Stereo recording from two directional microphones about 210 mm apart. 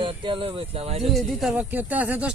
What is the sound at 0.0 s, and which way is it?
Speech, 25° right (ahead or behind).